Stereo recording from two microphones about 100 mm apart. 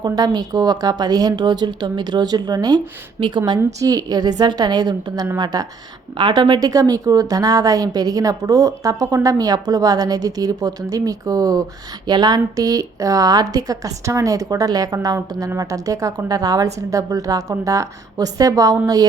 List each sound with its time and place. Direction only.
0.0 s a woman's voice: 45° right (ahead or behind)
3.6 s a woman's voice: 35° right (ahead or behind)